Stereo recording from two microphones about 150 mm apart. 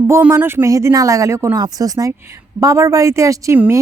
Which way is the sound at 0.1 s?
15° right (ahead or behind).